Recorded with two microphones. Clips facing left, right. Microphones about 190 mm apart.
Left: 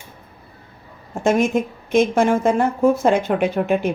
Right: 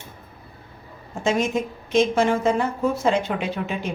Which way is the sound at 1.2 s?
55° left (ahead or behind).